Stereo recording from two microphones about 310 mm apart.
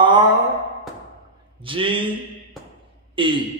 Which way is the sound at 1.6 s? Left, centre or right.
Centre.